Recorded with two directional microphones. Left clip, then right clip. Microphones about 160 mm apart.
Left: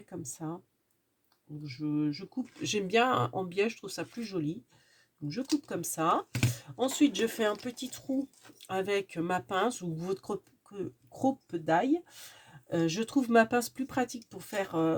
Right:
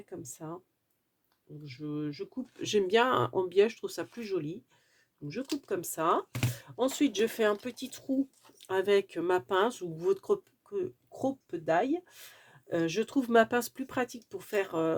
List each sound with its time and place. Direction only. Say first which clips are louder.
0.4 s speech: left 3 dB; 35° right (ahead or behind)
1.6 s speech: left 5 dB; 30° right (ahead or behind)
5.6 s speech: right 3 dB; 35° right (ahead or behind)